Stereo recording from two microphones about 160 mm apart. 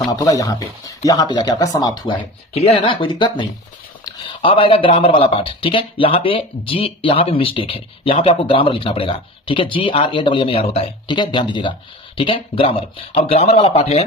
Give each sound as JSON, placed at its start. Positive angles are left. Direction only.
{"t": 0.1, "sound": "speech", "side_deg": 20}